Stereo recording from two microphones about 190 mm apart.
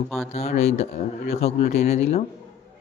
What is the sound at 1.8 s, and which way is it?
Speech, 35° left (ahead or behind).